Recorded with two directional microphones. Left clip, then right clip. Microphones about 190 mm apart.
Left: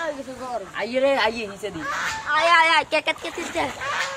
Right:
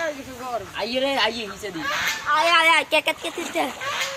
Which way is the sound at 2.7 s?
25° right (ahead or behind).